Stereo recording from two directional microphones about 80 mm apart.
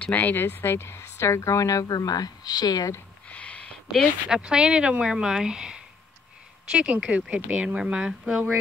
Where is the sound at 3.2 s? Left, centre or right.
Centre.